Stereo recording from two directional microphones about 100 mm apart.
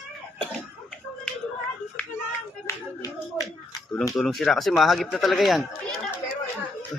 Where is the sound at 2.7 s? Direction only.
35° left (ahead or behind).